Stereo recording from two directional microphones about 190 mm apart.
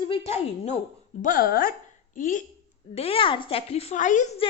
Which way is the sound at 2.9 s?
30° left (ahead or behind).